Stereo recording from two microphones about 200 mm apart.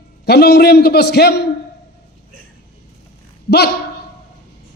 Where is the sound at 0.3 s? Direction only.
55° left (ahead or behind).